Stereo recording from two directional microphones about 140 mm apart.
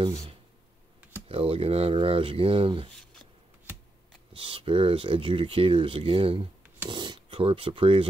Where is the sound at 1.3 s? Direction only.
40° right (ahead or behind).